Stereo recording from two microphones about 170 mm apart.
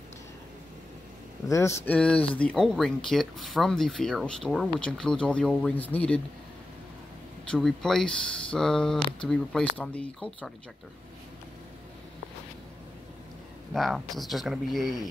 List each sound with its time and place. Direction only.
1.5 s speech: 15° left (ahead or behind)
7.5 s speech: centre (ahead or behind)
13.7 s speech: centre (ahead or behind)